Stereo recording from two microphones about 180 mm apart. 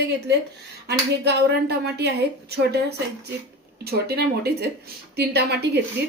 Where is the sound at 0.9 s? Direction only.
65° right (ahead or behind).